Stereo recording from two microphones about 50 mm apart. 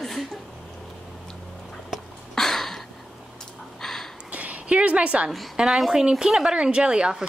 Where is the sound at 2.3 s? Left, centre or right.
Centre.